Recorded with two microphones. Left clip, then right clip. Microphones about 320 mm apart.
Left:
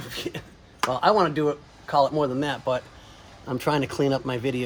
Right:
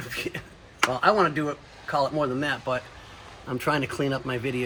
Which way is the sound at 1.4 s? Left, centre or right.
Centre.